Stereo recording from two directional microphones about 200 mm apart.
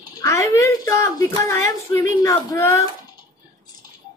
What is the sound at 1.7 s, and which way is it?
Speech, 15° left (ahead or behind).